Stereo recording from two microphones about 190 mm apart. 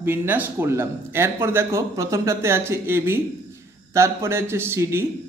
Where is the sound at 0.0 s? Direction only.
10° right (ahead or behind).